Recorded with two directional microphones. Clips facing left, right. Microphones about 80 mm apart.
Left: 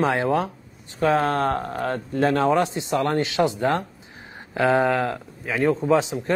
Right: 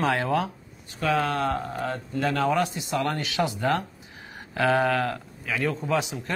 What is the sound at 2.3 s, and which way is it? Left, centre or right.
Speech, left.